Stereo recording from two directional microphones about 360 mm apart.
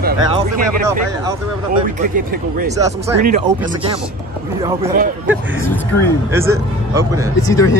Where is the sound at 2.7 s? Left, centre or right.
Centre.